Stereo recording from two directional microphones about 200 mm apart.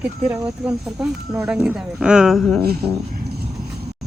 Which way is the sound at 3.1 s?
50° right (ahead or behind).